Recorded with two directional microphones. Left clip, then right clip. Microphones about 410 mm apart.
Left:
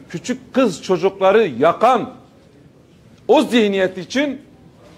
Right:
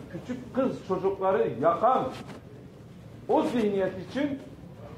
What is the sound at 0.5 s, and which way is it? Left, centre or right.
A man's voice, left.